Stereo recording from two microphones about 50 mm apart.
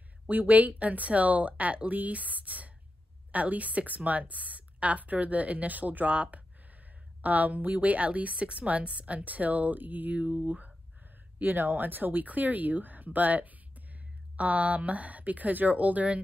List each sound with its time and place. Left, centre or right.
0.3 s a woman's voice: right